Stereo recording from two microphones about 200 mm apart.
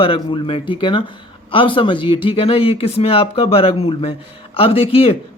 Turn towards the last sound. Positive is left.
turn(degrees=30)  # may be behind; listen again after turning